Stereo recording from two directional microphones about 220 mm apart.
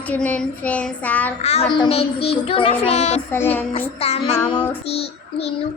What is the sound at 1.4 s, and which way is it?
Child singing, 30° left (ahead or behind).